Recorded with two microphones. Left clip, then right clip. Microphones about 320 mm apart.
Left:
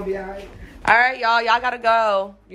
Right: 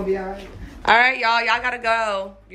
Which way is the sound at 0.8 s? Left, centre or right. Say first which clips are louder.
Even; centre.